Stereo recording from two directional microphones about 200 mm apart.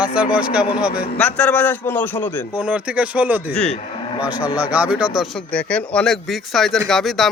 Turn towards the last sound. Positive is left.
turn(degrees=0)  # may be behind; listen again after turning